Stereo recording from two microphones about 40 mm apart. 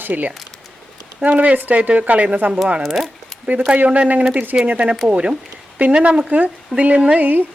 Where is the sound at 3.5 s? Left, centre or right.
Right.